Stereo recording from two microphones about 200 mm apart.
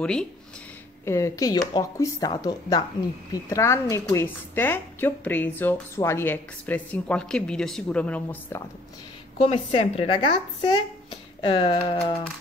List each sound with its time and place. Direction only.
0.0 s speech: 5° left (ahead or behind)
1.0 s a woman's voice: 15° left (ahead or behind)
9.4 s a woman's voice: 30° left (ahead or behind)